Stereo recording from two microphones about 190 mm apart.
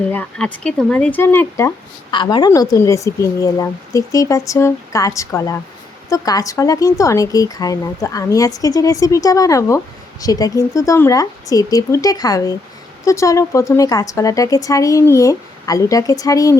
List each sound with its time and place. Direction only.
0.0 s speech: 5° left (ahead or behind)